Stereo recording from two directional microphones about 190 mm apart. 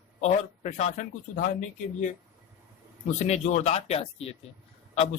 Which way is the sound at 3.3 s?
35° left (ahead or behind).